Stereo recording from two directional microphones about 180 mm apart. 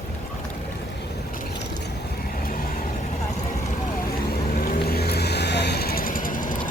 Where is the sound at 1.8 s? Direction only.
55° left (ahead or behind).